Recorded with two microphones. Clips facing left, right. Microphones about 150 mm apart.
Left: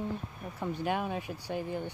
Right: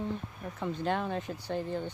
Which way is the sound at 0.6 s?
10° left (ahead or behind).